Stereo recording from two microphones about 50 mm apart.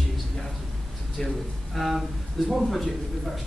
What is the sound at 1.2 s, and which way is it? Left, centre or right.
A man's voice, centre.